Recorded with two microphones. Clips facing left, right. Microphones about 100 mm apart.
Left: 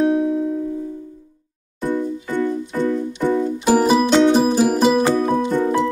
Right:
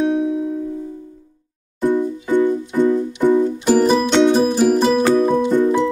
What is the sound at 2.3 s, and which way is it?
Keyboard, 15° right (ahead or behind).